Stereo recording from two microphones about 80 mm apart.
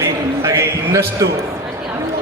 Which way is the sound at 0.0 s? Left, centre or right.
Right.